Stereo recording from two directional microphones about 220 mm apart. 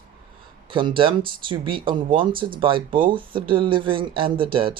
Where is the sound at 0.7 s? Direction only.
20° right (ahead or behind).